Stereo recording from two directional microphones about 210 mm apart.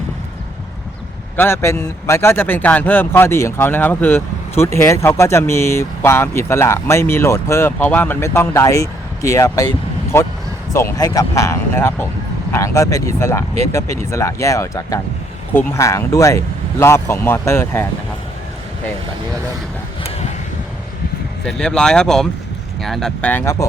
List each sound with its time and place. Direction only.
1.4 s speech: 10° left (ahead or behind)
20.1 s a sound: 30° left (ahead or behind)
21.4 s speech: 5° left (ahead or behind)